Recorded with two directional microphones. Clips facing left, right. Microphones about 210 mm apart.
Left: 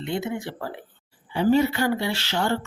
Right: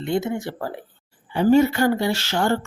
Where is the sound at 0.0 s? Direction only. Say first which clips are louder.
Right 4 dB; 45° right (ahead or behind).